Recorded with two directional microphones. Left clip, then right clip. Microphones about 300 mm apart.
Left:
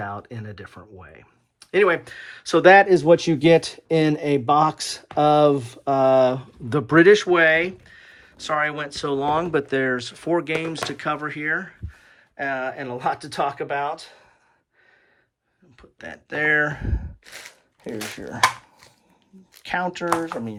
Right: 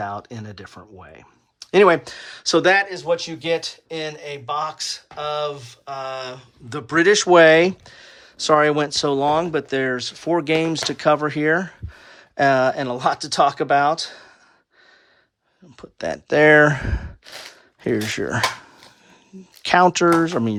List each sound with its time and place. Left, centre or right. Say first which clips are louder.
0.0 s speech: right 3 dB; centre
2.8 s speech: left 7 dB; centre; by 14.3 s right
15.8 s speech: right 11 dB; centre
19.6 s speech: right 10 dB; centre